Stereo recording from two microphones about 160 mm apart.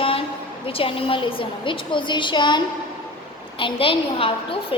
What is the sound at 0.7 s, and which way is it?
A child's voice, 35° left (ahead or behind).